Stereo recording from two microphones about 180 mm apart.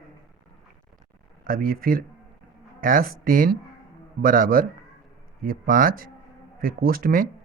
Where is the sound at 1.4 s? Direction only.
50° right (ahead or behind).